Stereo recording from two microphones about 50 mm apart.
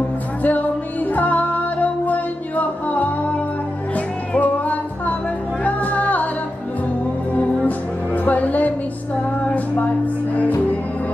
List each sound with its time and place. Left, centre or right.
0.4 s music: left
1.1 s singing: left
3.9 s music: left
7.3 s music: left